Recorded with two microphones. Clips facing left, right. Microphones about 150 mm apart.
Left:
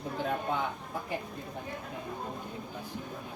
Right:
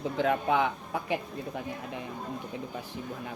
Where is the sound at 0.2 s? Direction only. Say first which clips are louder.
Right 6 dB; 90° right.